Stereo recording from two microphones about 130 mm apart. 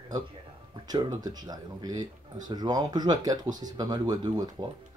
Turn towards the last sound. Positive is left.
turn(degrees=-30)  # may be behind; listen again after turning